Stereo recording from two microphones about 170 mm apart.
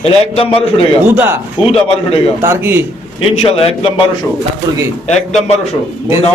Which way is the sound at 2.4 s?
10° right (ahead or behind).